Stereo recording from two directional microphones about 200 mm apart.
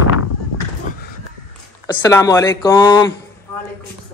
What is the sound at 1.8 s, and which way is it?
Speech, 15° left (ahead or behind).